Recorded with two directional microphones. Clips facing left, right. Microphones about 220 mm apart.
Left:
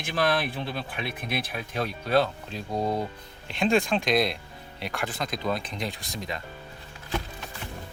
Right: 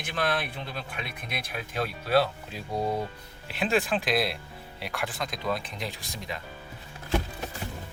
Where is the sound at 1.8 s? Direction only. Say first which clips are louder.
Left 1 dB; 5° right (ahead or behind).